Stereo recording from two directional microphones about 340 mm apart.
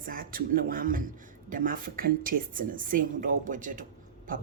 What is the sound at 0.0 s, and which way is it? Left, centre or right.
Speech, right.